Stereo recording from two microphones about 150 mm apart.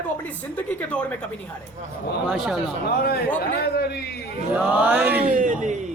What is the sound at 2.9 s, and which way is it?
A man's voice, 90° left.